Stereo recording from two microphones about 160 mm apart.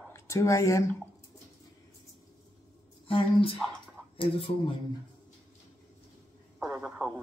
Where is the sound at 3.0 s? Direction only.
35° left (ahead or behind).